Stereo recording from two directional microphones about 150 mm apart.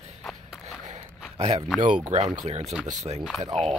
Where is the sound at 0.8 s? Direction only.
55° right (ahead or behind).